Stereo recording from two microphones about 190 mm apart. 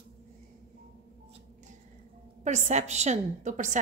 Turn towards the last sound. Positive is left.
turn(degrees=-40)  # may be behind; listen again after turning